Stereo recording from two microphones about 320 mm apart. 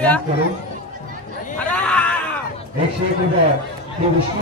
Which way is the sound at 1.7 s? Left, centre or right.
Centre.